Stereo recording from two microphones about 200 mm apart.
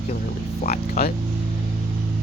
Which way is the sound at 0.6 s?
45° left (ahead or behind).